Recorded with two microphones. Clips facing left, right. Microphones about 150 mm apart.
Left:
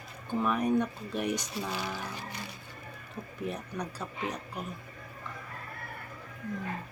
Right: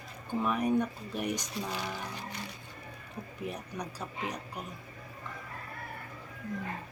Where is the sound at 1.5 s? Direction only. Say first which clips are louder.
Left 1 dB; 5° left (ahead or behind).